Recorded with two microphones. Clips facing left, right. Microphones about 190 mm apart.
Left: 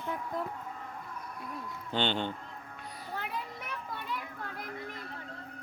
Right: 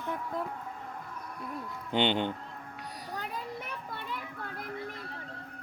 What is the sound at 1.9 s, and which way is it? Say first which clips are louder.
Speech: right 3 dB; 15° right (ahead or behind).